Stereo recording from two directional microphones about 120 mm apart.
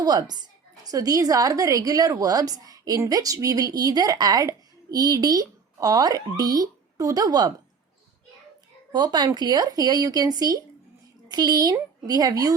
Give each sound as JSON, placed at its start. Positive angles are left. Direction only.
{"t": 0.0, "sound": "a woman's voice", "side_deg": -35}
{"t": 8.9, "sound": "a woman's voice", "side_deg": -35}